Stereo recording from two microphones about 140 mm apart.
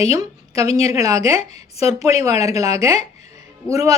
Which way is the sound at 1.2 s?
45° left (ahead or behind).